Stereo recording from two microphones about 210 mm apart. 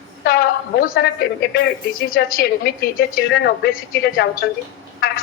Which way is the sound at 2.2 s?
50° left (ahead or behind).